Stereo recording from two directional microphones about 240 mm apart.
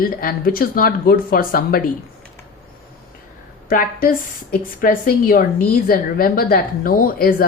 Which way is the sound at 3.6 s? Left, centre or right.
Left.